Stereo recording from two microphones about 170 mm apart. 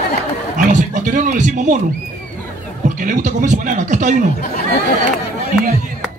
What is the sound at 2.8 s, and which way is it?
A man's voice, 45° right (ahead or behind).